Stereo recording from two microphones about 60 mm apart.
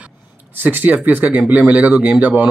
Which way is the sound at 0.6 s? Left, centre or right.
Right.